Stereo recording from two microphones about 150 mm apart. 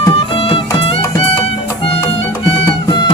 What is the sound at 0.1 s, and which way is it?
Music, 40° left (ahead or behind).